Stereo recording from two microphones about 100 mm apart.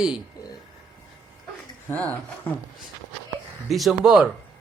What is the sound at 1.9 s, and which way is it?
Speech, 15° left (ahead or behind).